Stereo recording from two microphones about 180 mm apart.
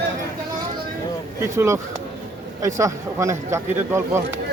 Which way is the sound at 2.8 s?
15° right (ahead or behind).